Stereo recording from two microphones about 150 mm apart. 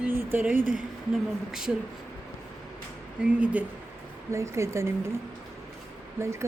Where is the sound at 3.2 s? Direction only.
10° right (ahead or behind).